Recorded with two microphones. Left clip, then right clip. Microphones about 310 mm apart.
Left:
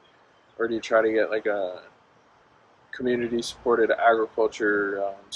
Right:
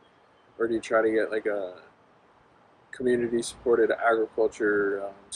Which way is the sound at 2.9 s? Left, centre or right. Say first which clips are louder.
Even; centre.